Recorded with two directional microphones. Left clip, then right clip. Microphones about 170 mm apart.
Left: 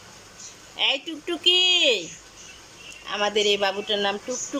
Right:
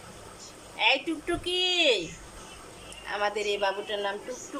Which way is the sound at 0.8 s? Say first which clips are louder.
Left 1 dB; 15° left (ahead or behind).